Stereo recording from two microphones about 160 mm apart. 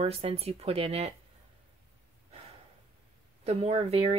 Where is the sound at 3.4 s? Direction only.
40° right (ahead or behind).